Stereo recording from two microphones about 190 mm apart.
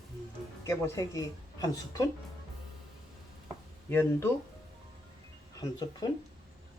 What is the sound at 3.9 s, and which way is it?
Speech, 10° left (ahead or behind).